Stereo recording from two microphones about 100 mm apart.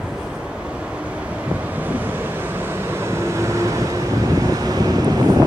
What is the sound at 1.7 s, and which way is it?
Vehicle, 15° right (ahead or behind).